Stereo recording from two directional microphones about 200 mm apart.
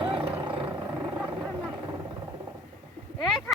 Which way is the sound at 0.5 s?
25° right (ahead or behind).